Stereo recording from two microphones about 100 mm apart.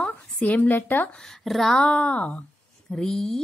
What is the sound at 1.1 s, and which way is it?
A woman's voice, 5° left (ahead or behind).